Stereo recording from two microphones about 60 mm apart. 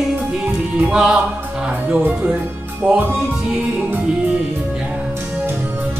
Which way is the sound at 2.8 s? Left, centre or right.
Centre.